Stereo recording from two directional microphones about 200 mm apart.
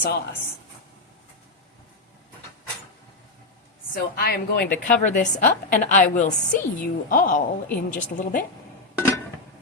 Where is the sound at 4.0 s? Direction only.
50° left (ahead or behind).